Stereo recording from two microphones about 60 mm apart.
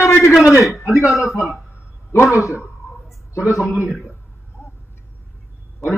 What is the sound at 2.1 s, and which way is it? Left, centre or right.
Speech, left.